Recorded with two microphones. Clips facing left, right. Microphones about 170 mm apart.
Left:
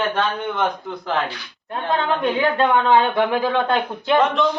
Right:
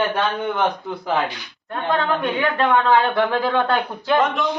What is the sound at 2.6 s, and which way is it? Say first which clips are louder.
Speech: right 1 dB; 25° left (ahead or behind).